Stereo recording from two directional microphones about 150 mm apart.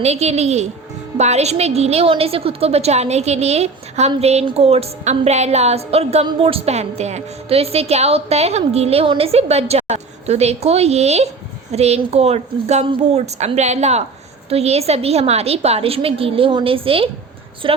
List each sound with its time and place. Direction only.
0.0 s a woman's voice: 45° right (ahead or behind)